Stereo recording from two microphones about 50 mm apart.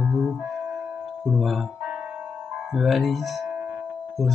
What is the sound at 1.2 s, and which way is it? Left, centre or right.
Music, centre.